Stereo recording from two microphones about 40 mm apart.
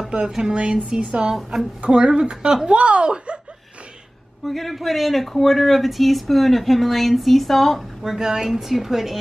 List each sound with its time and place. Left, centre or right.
0.4 s speech: right
1.3 s speech: centre
1.8 s speech: right
4.5 s speech: centre
8.0 s a woman's voice: centre